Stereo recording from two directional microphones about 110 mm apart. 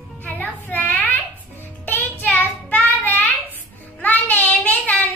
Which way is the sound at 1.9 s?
15° left (ahead or behind).